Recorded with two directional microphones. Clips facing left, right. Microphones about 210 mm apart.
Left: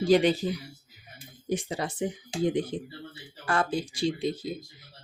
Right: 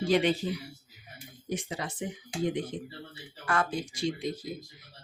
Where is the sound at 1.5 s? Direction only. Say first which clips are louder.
Left 5 dB; 35° left (ahead or behind).